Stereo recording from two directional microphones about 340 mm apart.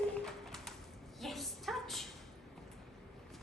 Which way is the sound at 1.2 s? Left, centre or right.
Centre.